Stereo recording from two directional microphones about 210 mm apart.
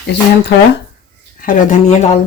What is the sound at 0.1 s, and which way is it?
Speech, 55° left (ahead or behind).